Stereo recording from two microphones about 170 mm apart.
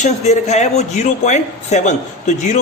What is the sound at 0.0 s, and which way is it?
A man's voice, 40° left (ahead or behind).